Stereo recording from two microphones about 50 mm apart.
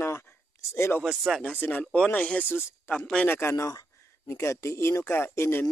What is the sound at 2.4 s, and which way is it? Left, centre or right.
Speech, left.